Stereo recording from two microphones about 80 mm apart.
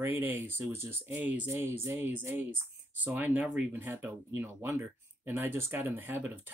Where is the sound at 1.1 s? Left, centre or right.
Centre.